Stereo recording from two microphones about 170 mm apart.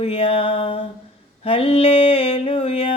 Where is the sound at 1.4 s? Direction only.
35° left (ahead or behind).